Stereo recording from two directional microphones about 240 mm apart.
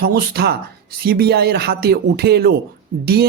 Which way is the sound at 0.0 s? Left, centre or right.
Right.